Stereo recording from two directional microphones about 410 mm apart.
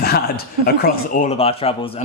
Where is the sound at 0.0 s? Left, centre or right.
Left.